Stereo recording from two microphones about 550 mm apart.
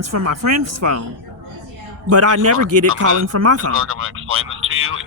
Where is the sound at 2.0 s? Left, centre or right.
Right.